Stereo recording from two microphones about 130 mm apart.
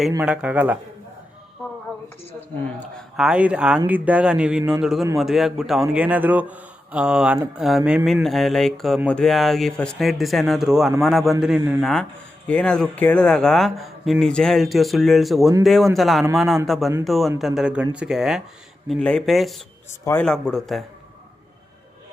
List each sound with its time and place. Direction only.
0.2 s speech: 10° right (ahead or behind)
3.2 s speech: 5° right (ahead or behind)